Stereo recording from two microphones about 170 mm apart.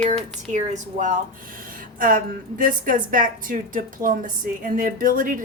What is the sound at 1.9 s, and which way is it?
A woman's voice, 55° right (ahead or behind).